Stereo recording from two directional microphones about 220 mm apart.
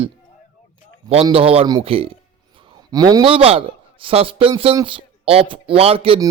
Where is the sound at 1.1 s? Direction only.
25° right (ahead or behind).